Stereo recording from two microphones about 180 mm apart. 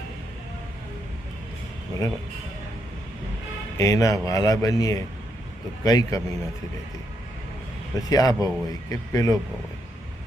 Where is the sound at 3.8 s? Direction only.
20° left (ahead or behind).